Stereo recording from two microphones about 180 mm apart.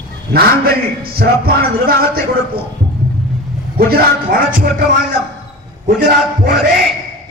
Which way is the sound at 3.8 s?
55° right (ahead or behind).